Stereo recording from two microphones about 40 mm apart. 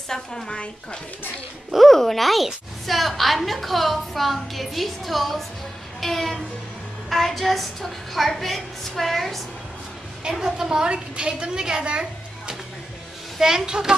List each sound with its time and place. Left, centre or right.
0.1 s a woman's voice: centre
1.9 s a woman's voice: centre
5.9 s music: centre
7.1 s a woman's voice: centre
10.4 s a woman's voice: centre
13.4 s speech: centre